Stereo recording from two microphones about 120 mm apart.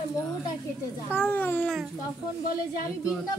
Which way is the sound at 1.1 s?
15° left (ahead or behind).